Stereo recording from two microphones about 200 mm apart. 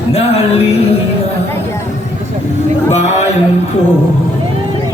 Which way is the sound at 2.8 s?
35° left (ahead or behind).